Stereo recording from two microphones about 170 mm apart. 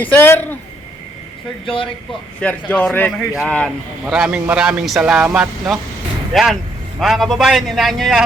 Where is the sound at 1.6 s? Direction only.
30° left (ahead or behind).